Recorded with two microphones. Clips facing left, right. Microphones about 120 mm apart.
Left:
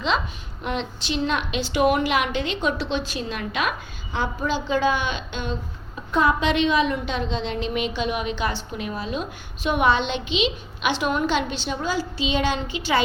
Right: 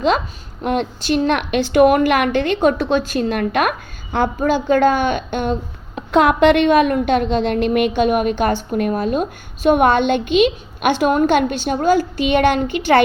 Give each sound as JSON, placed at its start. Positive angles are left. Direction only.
{"t": 0.6, "sound": "a woman's voice", "side_deg": -50}
{"t": 6.1, "sound": "a woman's voice", "side_deg": -75}